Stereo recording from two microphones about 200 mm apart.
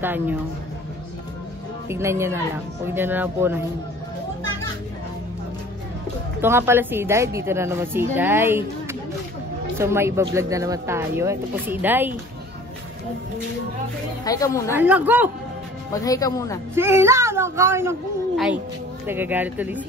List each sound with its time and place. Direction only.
0.0 s speech: 10° right (ahead or behind)
1.9 s speech: 15° right (ahead or behind)
6.4 s speech: 10° right (ahead or behind)
9.8 s speech: 15° right (ahead or behind)
14.2 s speech: 15° left (ahead or behind)
14.8 s speech: 10° right (ahead or behind)
15.9 s speech: 15° left (ahead or behind)
16.7 s speech: 10° right (ahead or behind)
18.3 s speech: centre (ahead or behind)